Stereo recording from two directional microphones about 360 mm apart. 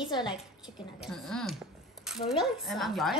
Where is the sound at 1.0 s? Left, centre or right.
Centre.